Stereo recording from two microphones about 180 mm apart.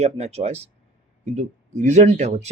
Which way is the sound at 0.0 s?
35° right (ahead or behind).